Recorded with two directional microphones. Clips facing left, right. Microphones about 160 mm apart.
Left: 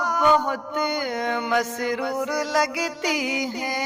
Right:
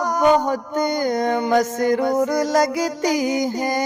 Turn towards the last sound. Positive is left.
turn(degrees=-45)  # may be behind; listen again after turning